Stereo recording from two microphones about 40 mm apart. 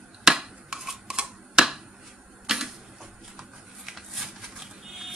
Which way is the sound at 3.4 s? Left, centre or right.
Centre.